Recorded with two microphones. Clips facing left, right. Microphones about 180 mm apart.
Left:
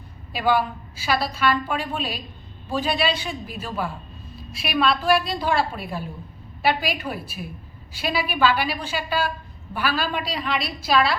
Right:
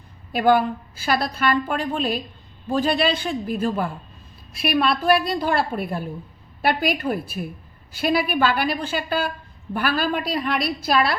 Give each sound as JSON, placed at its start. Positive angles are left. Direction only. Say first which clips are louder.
{"t": 0.3, "sound": "a woman's voice", "louder": "right 4 dB", "side_deg": -50}